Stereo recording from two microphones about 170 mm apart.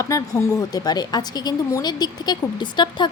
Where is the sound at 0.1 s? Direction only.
20° left (ahead or behind).